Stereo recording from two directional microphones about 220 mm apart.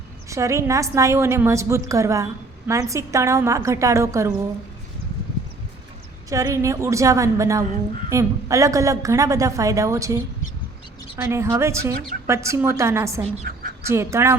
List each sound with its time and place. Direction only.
0.3 s a woman's voice: 15° right (ahead or behind)
6.3 s a woman's voice: 15° right (ahead or behind)
11.2 s a woman's voice: 10° right (ahead or behind)
13.4 s duck: 40° right (ahead or behind)
13.8 s a woman's voice: 10° right (ahead or behind)